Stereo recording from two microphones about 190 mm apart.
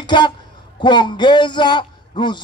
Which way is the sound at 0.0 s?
25° left (ahead or behind).